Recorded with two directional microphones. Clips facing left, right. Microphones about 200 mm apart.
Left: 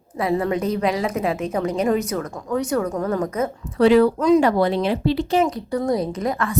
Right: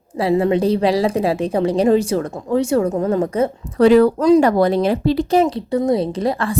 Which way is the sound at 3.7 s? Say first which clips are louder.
Right 3 dB; 45° right (ahead or behind).